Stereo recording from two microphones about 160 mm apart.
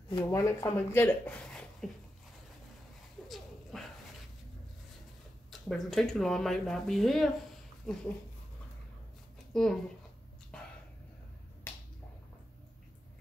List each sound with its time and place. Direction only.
0.3 s speech: 20° left (ahead or behind)
3.7 s dog: centre (ahead or behind)
5.5 s speech: centre (ahead or behind)
9.5 s speech: centre (ahead or behind)